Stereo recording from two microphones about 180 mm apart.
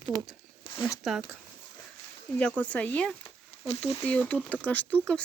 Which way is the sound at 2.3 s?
5° left (ahead or behind).